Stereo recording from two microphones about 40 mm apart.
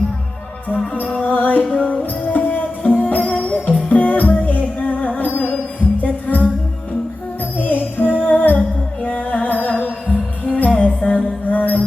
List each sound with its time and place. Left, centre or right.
1.2 s music: left
7.6 s music: left
11.4 s music: left